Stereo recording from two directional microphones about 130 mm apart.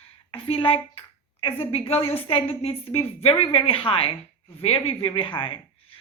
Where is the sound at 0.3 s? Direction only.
45° left (ahead or behind).